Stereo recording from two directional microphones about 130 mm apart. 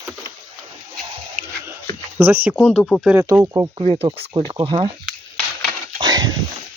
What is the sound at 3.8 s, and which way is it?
Speech, 50° right (ahead or behind).